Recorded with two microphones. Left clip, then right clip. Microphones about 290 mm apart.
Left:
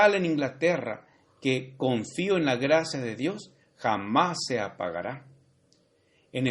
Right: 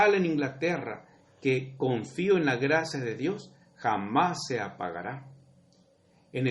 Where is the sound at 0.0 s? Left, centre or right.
Left.